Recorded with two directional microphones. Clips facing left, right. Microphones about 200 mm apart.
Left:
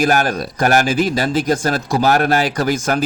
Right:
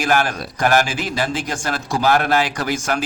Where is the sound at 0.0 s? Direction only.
40° left (ahead or behind).